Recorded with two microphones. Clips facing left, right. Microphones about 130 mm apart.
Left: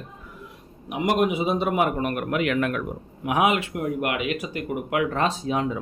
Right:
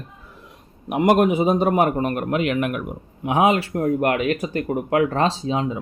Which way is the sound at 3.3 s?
30° right (ahead or behind).